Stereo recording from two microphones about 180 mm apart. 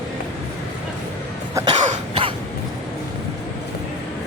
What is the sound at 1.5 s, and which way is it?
Cough, 25° right (ahead or behind).